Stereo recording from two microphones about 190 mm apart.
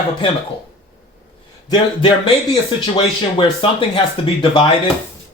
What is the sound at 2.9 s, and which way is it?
Speech, 25° left (ahead or behind).